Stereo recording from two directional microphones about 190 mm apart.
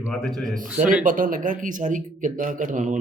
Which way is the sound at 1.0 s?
45° right (ahead or behind).